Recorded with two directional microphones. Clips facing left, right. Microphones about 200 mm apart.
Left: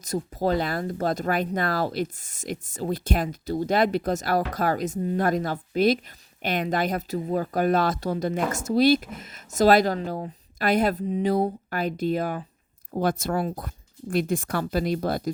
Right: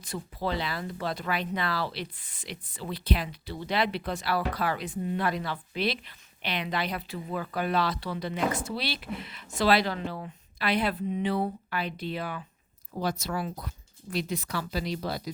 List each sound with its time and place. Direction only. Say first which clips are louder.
0.0 s speech: left 7 dB; 45° left (ahead or behind)